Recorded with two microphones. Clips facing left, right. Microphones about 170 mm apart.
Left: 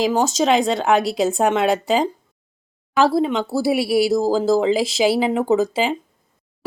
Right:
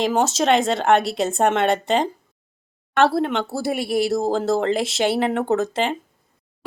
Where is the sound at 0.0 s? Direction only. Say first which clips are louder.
Left 1 dB; 5° right (ahead or behind).